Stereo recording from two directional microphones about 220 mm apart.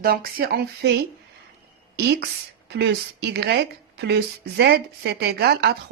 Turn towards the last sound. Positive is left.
turn(degrees=-45)  # may be behind; listen again after turning